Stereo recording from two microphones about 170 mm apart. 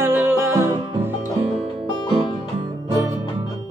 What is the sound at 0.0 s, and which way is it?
Music, 10° right (ahead or behind).